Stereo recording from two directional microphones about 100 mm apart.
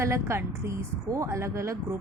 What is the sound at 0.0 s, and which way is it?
A woman's voice, 25° right (ahead or behind).